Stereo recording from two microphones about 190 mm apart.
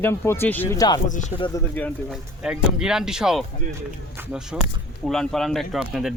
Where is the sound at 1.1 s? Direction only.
40° left (ahead or behind).